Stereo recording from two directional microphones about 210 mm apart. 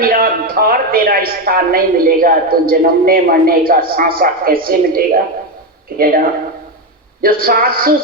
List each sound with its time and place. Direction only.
0.0 s speech: 45° right (ahead or behind)